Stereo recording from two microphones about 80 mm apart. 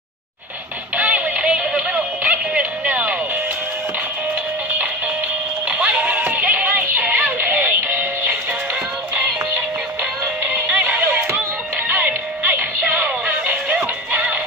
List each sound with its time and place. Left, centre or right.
0.9 s music: centre
5.7 s music: centre
10.8 s music: right